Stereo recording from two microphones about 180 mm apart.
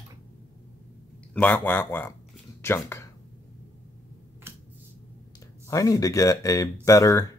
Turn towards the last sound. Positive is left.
turn(degrees=20)  # may be behind; listen again after turning